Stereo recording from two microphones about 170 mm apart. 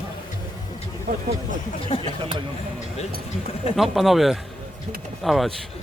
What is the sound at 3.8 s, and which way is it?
Speech, centre (ahead or behind).